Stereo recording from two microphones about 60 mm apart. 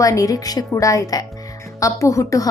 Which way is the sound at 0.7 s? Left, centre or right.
Left.